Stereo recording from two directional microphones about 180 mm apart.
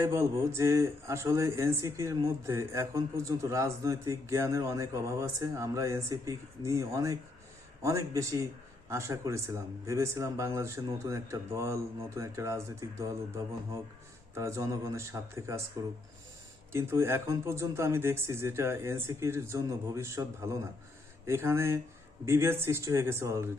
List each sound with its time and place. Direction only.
0.0 s speech: 15° right (ahead or behind)
14.3 s speech: 15° right (ahead or behind)
16.7 s speech: 15° right (ahead or behind)